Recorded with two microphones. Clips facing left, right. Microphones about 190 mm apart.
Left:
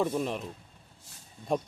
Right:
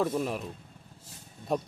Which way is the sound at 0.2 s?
5° right (ahead or behind).